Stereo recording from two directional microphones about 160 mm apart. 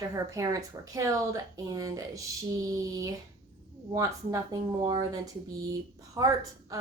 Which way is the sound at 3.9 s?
20° right (ahead or behind).